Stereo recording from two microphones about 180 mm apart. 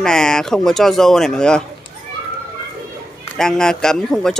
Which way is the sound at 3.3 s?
5° left (ahead or behind).